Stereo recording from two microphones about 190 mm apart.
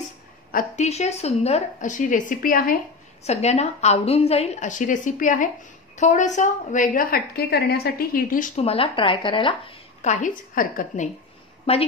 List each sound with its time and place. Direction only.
0.5 s a woman's voice: 40° left (ahead or behind)
3.3 s a woman's voice: 35° left (ahead or behind)
8.6 s speech: 30° left (ahead or behind)
10.0 s a woman's voice: 45° left (ahead or behind)
11.7 s a woman's voice: 30° left (ahead or behind)